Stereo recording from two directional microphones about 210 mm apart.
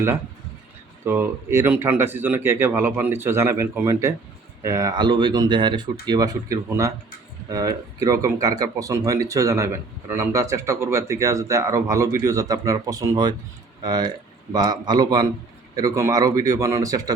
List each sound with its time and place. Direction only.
1.0 s speech: 10° right (ahead or behind)